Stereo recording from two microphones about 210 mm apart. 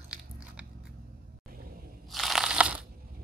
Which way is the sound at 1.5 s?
45° right (ahead or behind).